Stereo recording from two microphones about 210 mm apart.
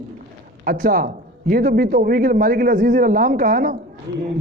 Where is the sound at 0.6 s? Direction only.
45° right (ahead or behind).